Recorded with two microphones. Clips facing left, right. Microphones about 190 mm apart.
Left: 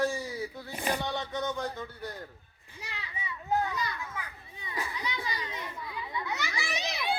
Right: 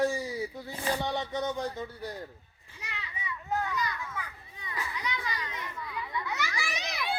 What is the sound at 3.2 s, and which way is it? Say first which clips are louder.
Children playing: left 3 dB; 30° left (ahead or behind).